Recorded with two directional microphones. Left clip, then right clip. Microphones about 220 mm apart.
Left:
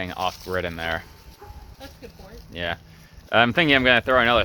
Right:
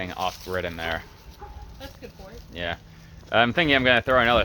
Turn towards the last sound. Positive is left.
turn(degrees=45)  # may be behind; listen again after turning